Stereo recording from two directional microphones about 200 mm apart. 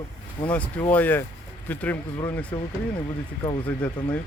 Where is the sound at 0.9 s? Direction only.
10° left (ahead or behind).